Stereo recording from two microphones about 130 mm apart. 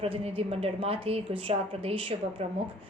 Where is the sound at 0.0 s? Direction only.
50° right (ahead or behind).